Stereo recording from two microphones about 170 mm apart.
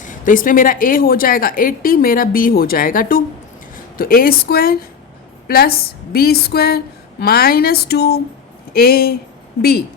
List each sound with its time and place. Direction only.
0.0 s speech: 50° left (ahead or behind)